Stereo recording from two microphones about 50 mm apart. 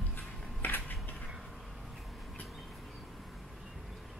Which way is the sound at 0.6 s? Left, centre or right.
Left.